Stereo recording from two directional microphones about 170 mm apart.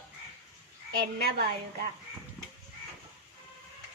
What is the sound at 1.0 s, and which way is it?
Speech, 65° right (ahead or behind).